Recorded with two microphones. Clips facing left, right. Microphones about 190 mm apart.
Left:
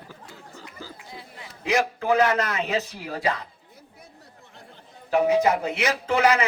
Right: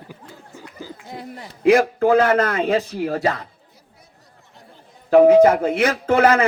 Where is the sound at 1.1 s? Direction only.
50° right (ahead or behind).